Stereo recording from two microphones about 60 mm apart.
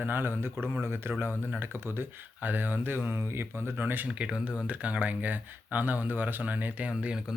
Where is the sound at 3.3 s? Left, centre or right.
Right.